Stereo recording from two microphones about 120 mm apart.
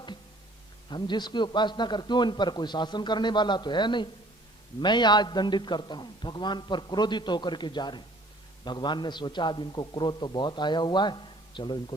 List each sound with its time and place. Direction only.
0.9 s a man's voice: 40° left (ahead or behind)